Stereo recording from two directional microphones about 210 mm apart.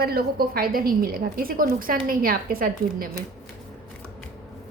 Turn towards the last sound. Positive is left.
turn(degrees=-45)  # may be behind; listen again after turning